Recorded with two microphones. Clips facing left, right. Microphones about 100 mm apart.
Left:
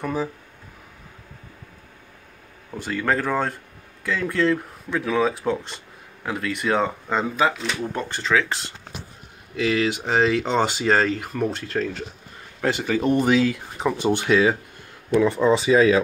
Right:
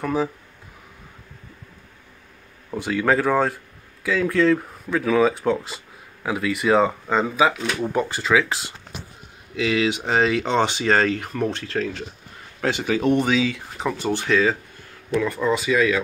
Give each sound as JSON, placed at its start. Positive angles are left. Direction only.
{"t": 2.7, "sound": "speech", "side_deg": -10}
{"t": 13.9, "sound": "speech", "side_deg": 15}